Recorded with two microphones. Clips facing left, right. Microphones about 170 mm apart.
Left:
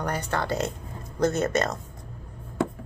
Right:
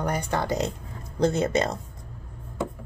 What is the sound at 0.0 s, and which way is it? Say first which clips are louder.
A woman's voice: right 1 dB; 10° right (ahead or behind).